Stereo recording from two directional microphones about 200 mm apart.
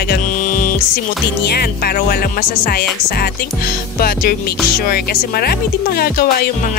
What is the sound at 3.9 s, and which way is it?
Speech, 50° left (ahead or behind).